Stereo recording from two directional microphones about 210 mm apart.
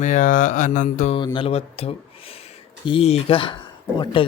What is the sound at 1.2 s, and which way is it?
Speech, 25° left (ahead or behind).